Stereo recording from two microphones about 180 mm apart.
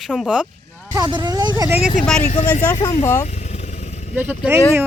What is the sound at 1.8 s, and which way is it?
Speech, centre (ahead or behind).